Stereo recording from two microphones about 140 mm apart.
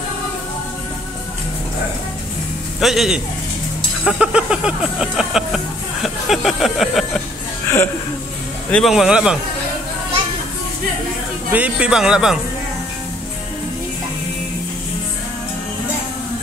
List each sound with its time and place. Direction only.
2.8 s speech: centre (ahead or behind)
7.6 s a sound: 15° left (ahead or behind)
8.6 s speech: 10° left (ahead or behind)
8.9 s speech: 5° right (ahead or behind)
11.5 s speech: 10° right (ahead or behind)